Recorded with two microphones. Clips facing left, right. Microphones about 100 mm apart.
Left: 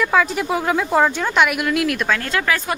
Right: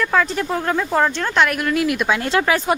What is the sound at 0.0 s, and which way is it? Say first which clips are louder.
Speech: left 1 dB; 5° left (ahead or behind).